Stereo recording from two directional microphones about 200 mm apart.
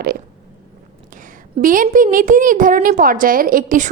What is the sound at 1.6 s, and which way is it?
A woman's voice, 40° right (ahead or behind).